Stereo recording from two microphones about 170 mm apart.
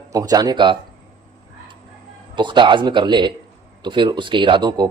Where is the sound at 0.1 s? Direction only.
20° right (ahead or behind).